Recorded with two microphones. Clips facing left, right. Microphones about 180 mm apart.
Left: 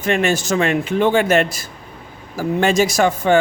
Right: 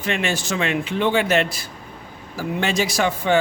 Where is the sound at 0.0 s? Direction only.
45° left (ahead or behind).